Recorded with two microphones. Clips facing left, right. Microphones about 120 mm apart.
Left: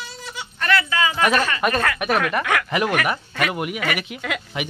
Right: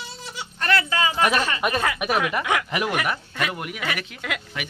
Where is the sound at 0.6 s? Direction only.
35° right (ahead or behind).